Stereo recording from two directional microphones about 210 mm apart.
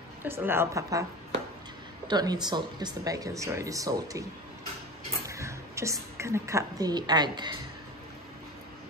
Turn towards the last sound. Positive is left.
turn(degrees=-20)  # may be behind; listen again after turning